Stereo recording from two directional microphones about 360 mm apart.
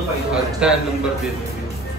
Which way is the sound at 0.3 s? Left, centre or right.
Centre.